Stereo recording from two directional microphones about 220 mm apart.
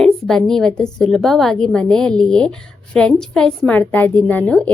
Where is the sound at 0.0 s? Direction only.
Centre (ahead or behind).